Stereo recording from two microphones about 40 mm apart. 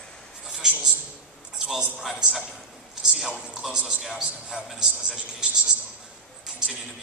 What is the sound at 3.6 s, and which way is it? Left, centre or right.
A man's voice, centre.